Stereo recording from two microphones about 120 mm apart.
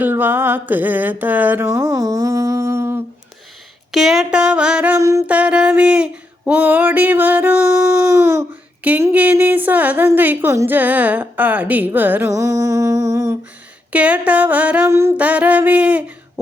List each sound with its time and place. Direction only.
0.0 s speech: 15° right (ahead or behind)
1.6 s speech: 25° right (ahead or behind)
3.9 s speech: centre (ahead or behind)
4.9 s music: 25° right (ahead or behind)
5.2 s a sound: 10° right (ahead or behind)
8.8 s a sound: 15° right (ahead or behind)
9.1 s speech: 15° right (ahead or behind)
12.3 s music: 25° right (ahead or behind)
13.9 s speech: 10° right (ahead or behind)
14.8 s speech: 20° right (ahead or behind)